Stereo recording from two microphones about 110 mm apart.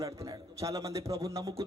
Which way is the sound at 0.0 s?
30° right (ahead or behind).